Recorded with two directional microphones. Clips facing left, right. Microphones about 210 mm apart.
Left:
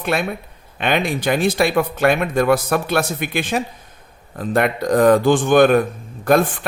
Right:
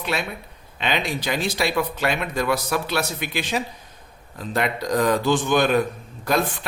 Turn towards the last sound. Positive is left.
turn(degrees=50)  # may be behind; listen again after turning